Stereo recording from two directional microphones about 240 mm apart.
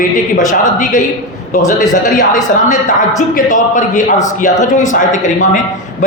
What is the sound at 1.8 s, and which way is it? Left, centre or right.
A man's voice, left.